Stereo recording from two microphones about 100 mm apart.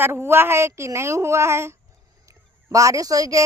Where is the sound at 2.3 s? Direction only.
35° right (ahead or behind).